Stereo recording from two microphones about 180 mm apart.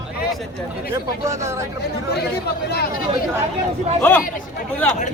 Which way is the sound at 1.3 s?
15° right (ahead or behind).